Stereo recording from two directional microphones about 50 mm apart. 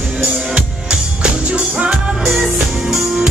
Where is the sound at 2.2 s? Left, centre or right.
Centre.